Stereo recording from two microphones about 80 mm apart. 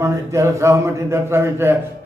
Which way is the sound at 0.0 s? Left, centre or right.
Right.